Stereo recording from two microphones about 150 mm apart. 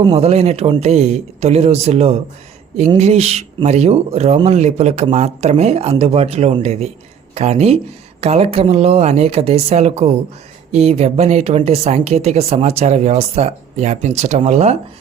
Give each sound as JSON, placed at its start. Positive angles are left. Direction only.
{"t": 0.2, "sound": "speech", "side_deg": -45}